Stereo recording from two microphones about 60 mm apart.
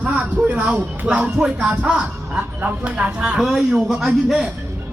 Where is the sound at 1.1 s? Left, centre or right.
Centre.